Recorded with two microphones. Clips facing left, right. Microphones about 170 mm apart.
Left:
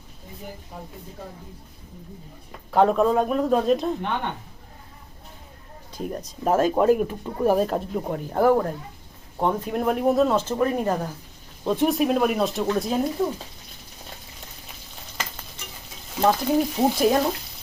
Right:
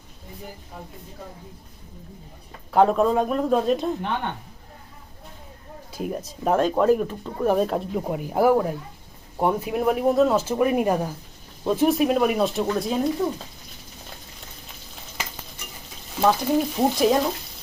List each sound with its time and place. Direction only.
2.7 s speech: centre (ahead or behind)
5.9 s speech: 5° right (ahead or behind)
16.2 s speech: centre (ahead or behind)